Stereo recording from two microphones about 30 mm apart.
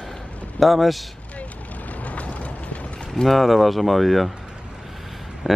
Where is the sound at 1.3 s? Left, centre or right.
Left.